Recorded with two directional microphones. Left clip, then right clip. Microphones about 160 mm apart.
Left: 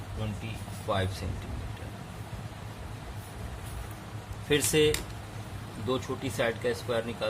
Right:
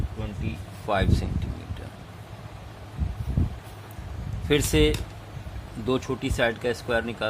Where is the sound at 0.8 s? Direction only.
65° right (ahead or behind).